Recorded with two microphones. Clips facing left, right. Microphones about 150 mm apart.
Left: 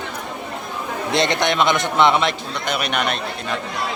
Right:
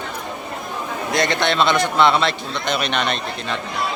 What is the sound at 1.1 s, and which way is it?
A man's voice, 20° left (ahead or behind).